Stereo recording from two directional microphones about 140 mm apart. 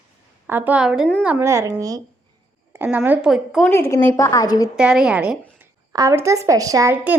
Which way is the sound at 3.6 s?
15° left (ahead or behind).